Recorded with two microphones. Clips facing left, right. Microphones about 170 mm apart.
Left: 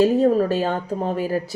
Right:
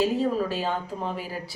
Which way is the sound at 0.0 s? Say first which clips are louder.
Left 8 dB; 45° left (ahead or behind).